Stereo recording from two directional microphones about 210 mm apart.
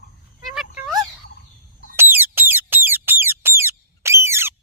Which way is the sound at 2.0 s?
10° right (ahead or behind).